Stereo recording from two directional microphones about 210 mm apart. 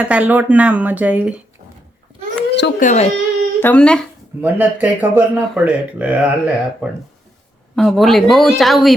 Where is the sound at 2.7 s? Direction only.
35° left (ahead or behind).